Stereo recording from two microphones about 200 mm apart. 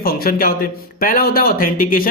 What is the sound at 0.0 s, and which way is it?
Speech, 50° left (ahead or behind).